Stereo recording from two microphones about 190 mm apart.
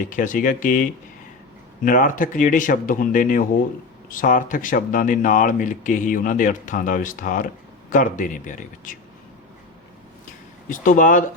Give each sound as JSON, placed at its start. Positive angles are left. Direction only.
{"t": 0.0, "sound": "speech", "side_deg": 45}
{"t": 10.7, "sound": "speech", "side_deg": 45}